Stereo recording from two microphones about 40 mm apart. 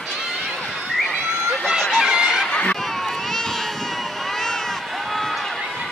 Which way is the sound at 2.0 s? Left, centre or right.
Centre.